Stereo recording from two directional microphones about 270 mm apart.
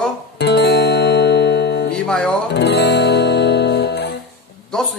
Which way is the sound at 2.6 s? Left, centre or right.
Left.